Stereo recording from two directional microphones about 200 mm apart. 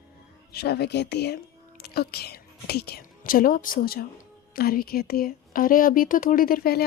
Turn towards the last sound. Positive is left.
turn(degrees=50)  # may be behind; listen again after turning